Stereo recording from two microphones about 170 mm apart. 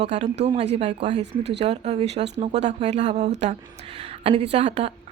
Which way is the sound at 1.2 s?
90° right.